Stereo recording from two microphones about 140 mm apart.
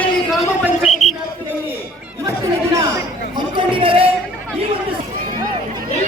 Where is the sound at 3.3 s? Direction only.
40° right (ahead or behind).